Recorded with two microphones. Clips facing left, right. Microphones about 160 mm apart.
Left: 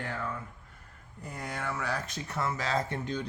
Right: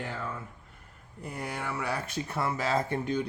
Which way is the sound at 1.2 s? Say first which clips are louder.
Right 1 dB; 10° right (ahead or behind).